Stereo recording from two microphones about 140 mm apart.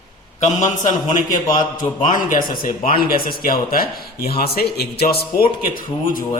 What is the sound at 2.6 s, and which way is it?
Speech, 90° left.